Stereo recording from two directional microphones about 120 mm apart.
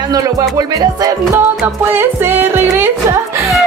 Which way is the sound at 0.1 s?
35° right (ahead or behind).